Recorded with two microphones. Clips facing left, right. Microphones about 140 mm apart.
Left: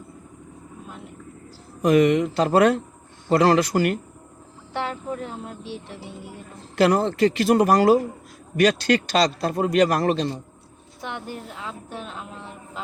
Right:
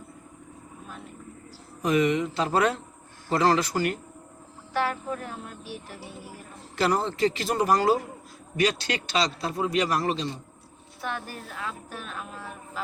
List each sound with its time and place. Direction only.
1.8 s speech: 55° left (ahead or behind)
4.7 s speech: 20° left (ahead or behind)
6.7 s a man's voice: 50° left (ahead or behind)
11.0 s speech: 20° left (ahead or behind)